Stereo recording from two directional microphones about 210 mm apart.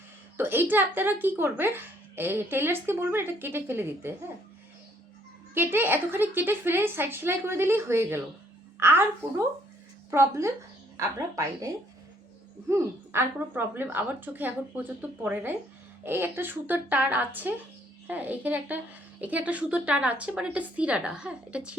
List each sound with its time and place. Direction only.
0.3 s speech: 10° right (ahead or behind)
5.5 s speech: 10° right (ahead or behind)
10.1 s a woman's voice: 15° right (ahead or behind)